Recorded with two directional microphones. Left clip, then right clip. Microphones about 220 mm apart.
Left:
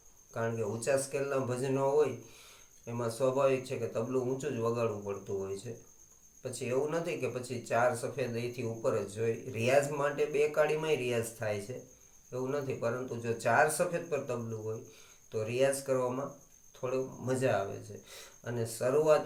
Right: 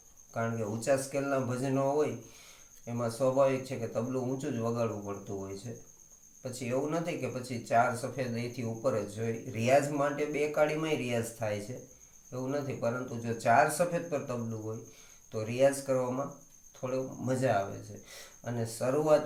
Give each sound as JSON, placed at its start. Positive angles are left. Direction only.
{"t": 0.3, "sound": "speech", "side_deg": 15}
{"t": 6.4, "sound": "speech", "side_deg": 15}